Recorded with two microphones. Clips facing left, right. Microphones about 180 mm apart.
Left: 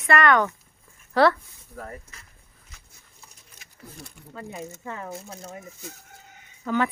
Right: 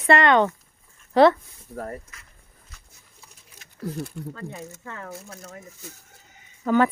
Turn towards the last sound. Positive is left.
turn(degrees=-45)  # may be behind; listen again after turning